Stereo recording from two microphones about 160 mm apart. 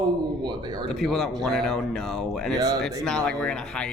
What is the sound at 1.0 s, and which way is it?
Speech, centre (ahead or behind).